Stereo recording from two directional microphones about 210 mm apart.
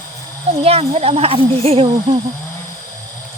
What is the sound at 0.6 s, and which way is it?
Speech, 30° right (ahead or behind).